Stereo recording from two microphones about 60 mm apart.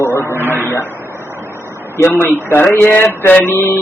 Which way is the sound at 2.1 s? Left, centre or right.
Left.